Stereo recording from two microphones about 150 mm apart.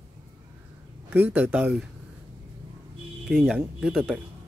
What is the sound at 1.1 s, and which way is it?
Speech, 10° right (ahead or behind).